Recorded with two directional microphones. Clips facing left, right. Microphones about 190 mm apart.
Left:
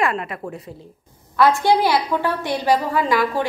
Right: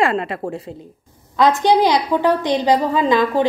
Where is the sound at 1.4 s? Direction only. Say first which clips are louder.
Right 2 dB; 20° right (ahead or behind).